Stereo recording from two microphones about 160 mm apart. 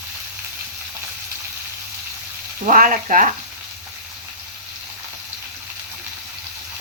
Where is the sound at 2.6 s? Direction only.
55° right (ahead or behind).